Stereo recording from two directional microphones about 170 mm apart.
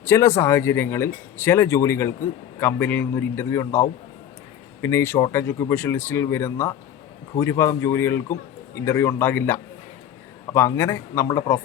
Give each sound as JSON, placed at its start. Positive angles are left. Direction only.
{"t": 0.0, "sound": "a man's voice", "side_deg": 15}